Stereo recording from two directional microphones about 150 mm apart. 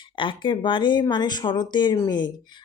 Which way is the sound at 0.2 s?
30° left (ahead or behind).